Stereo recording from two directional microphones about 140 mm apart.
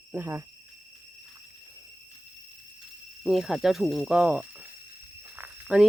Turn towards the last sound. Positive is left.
turn(degrees=-5)  # may be behind; listen again after turning